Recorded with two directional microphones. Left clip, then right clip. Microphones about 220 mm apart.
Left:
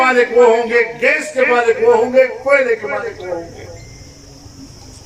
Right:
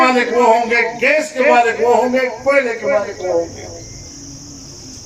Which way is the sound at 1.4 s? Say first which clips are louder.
Even; 20° right (ahead or behind).